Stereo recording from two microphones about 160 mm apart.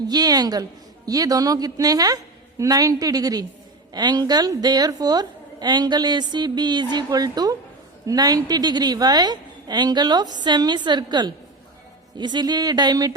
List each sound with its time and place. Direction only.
0.1 s a woman's voice: 25° right (ahead or behind)